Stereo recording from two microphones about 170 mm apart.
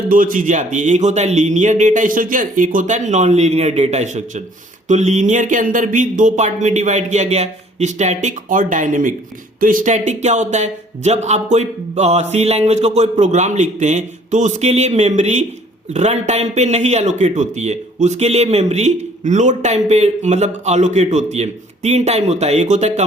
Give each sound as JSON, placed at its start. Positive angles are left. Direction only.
{"t": 0.1, "sound": "a man's voice", "side_deg": -55}